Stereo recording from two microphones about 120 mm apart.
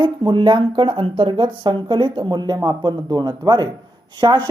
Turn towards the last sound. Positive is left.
turn(degrees=-40)  # may be behind; listen again after turning